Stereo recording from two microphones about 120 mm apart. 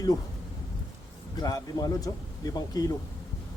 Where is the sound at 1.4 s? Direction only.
30° left (ahead or behind).